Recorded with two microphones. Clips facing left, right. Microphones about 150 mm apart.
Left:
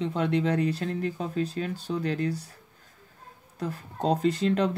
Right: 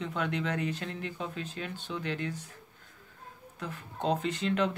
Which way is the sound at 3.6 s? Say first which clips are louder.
Left 6 dB; 35° left (ahead or behind).